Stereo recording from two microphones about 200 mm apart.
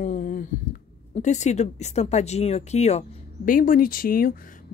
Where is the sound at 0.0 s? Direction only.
40° left (ahead or behind).